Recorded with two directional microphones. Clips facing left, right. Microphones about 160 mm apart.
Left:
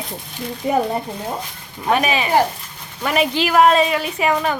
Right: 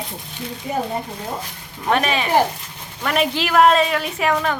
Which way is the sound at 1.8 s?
5° left (ahead or behind).